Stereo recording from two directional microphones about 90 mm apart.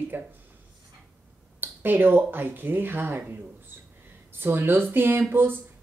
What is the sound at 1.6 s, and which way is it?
A woman's voice, 20° right (ahead or behind).